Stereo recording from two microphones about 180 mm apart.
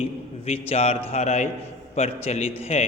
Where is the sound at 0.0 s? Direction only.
35° left (ahead or behind).